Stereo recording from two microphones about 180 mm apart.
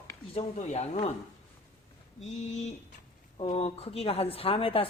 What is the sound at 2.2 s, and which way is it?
A woman's voice, 40° left (ahead or behind).